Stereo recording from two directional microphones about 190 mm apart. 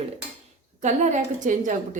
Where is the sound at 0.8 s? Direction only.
40° right (ahead or behind).